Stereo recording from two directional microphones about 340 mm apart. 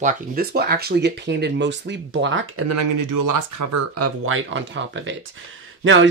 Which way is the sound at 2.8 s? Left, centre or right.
Right.